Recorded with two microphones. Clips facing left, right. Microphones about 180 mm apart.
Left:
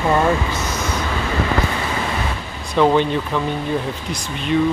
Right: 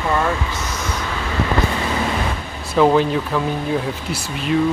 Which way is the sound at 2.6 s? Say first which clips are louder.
Right 1 dB; 5° right (ahead or behind).